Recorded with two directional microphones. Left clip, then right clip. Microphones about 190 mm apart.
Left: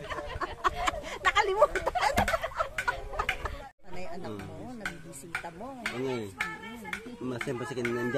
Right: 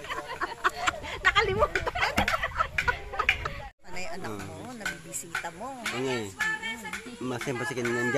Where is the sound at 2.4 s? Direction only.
55° left (ahead or behind).